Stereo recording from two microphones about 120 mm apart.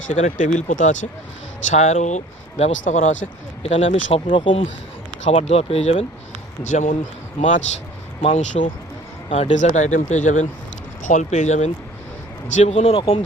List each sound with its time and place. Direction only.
0.1 s speech: 85° left
1.7 s speech: 75° left (ahead or behind); by 3.2 s 90° left
3.6 s speech: 65° left (ahead or behind); by 4.6 s 50° left (ahead or behind)
5.2 s speech: 65° left (ahead or behind)
6.6 s speech: 90° left
8.2 s speech: 60° left (ahead or behind); by 8.7 s 80° left
9.3 s speech: 65° left (ahead or behind)
12.5 s speech: 55° left (ahead or behind)